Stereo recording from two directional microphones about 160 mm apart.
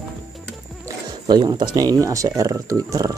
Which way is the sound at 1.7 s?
25° right (ahead or behind).